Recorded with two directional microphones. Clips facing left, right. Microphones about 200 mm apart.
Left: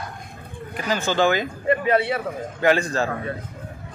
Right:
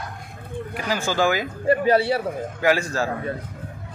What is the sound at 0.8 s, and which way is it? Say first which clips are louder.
Speech: left 2 dB; 10° right (ahead or behind).